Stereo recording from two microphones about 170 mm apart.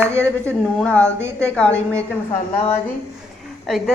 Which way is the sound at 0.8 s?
5° left (ahead or behind).